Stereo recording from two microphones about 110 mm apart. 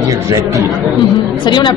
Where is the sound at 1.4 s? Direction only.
45° left (ahead or behind).